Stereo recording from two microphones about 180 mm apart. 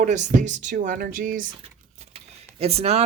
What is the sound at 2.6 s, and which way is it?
Speech, 35° right (ahead or behind).